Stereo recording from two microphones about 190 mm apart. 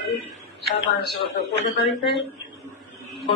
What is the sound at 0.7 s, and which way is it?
Speech, 60° left (ahead or behind).